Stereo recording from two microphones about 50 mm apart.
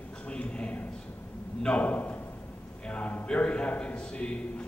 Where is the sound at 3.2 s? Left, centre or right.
Left.